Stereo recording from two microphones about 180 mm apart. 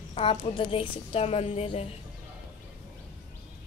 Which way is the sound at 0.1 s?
30° left (ahead or behind).